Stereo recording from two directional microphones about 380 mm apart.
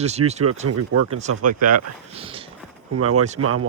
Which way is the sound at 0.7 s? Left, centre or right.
Right.